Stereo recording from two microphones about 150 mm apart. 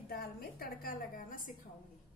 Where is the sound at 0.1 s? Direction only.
80° left; by 1.5 s 65° left (ahead or behind).